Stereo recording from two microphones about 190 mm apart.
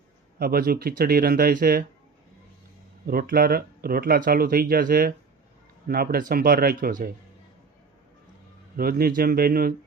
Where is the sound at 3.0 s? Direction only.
50° right (ahead or behind).